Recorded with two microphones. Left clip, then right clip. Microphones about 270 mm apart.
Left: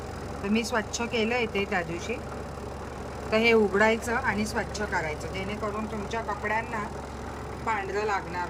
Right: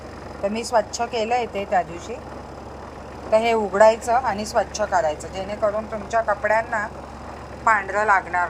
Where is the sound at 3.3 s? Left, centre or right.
Centre.